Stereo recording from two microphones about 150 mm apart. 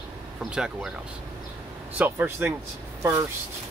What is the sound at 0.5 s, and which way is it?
Speech, 5° right (ahead or behind).